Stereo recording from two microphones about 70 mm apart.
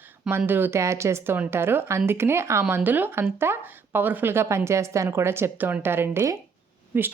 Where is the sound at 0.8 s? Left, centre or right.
Right.